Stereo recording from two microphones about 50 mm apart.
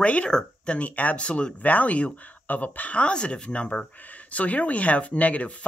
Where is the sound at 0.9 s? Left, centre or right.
Left.